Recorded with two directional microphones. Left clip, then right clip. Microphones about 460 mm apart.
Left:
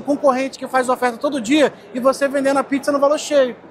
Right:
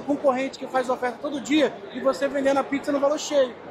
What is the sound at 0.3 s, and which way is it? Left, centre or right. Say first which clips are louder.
Speech: left 4 dB; left.